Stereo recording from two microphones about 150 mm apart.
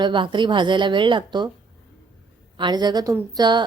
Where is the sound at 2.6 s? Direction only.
30° right (ahead or behind).